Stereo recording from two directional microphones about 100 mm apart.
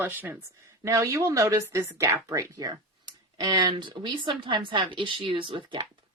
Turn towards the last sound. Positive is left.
turn(degrees=-55)  # may be behind; listen again after turning